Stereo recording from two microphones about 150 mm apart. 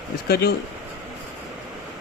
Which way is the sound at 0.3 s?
90° left.